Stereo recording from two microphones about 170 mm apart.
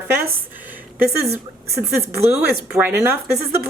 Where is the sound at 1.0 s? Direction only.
15° right (ahead or behind).